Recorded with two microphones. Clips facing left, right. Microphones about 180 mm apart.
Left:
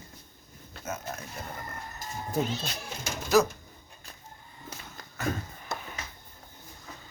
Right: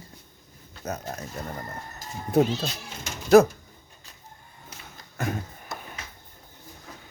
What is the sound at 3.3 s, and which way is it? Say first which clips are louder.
Speech: right 8 dB; 55° right (ahead or behind).